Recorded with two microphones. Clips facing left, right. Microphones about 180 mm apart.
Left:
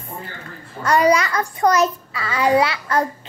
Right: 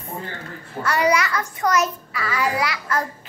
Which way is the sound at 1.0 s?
30° left (ahead or behind).